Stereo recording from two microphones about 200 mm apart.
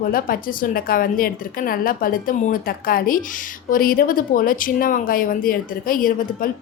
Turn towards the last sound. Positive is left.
turn(degrees=45)  # may be behind; listen again after turning